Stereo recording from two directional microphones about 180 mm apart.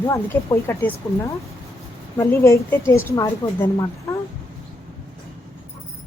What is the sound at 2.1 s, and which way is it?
Speech, 15° left (ahead or behind).